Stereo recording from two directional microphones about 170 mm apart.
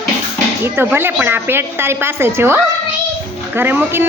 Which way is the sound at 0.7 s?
15° right (ahead or behind).